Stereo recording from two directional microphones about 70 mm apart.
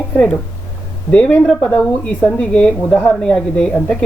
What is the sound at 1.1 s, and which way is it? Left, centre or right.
Speech, centre.